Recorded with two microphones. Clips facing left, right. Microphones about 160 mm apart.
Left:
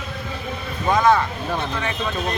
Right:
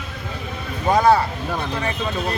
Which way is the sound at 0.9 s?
35° right (ahead or behind).